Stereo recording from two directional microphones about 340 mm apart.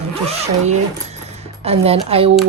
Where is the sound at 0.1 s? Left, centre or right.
Centre.